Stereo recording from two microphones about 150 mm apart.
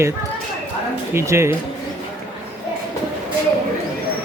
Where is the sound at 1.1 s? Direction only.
20° right (ahead or behind).